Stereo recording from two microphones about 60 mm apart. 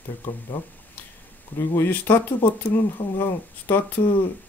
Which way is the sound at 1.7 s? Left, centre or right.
Left.